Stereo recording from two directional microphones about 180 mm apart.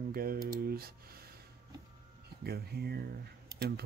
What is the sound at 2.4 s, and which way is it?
Speech, 60° right (ahead or behind).